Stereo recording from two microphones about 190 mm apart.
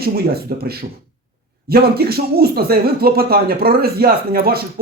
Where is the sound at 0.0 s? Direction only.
55° right (ahead or behind).